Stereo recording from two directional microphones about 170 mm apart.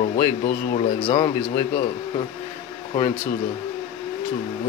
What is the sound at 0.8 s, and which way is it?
Speech, 35° left (ahead or behind).